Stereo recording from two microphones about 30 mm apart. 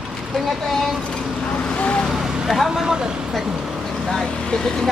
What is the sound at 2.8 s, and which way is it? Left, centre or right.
Speech, right.